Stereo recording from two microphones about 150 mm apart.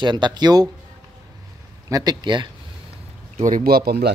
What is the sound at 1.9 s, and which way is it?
Speech, 25° right (ahead or behind).